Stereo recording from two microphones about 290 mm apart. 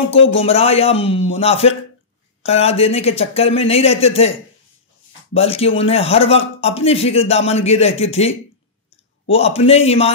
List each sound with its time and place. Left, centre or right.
0.1 s speech: left
0.4 s a man's voice: centre